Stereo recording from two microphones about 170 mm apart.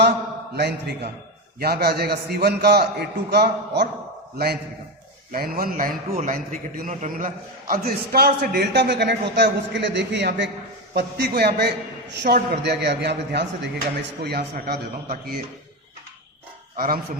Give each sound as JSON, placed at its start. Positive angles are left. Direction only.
{"t": 0.5, "sound": "a man's voice", "side_deg": -75}
{"t": 5.3, "sound": "a man's voice", "side_deg": -60}
{"t": 7.7, "sound": "a man's voice", "side_deg": -65}
{"t": 10.9, "sound": "a man's voice", "side_deg": -75}
{"t": 14.2, "sound": "a man's voice", "side_deg": -70}
{"t": 16.7, "sound": "speech", "side_deg": -60}